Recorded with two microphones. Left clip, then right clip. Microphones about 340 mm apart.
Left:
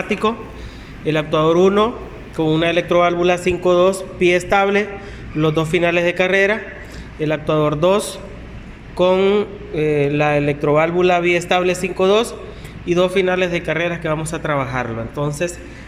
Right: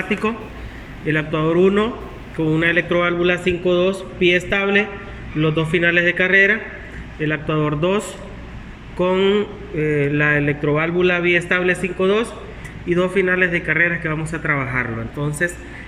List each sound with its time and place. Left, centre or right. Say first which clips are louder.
0.1 s a man's voice: left 3 dB; centre